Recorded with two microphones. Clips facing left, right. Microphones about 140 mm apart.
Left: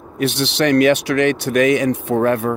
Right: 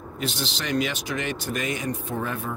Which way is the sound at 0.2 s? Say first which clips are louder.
Left 13 dB; 70° left (ahead or behind).